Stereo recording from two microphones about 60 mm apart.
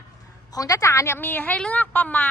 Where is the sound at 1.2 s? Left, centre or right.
Left.